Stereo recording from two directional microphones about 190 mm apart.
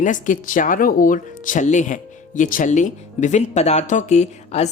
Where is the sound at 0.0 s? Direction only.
40° left (ahead or behind).